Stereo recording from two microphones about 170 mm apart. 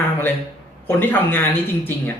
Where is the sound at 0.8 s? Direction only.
10° left (ahead or behind).